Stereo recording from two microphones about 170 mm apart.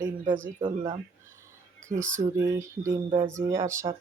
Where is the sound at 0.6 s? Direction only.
20° right (ahead or behind).